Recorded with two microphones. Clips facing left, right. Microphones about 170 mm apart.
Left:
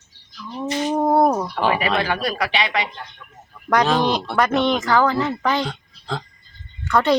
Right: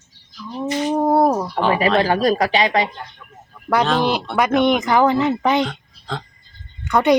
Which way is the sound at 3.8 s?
5° right (ahead or behind).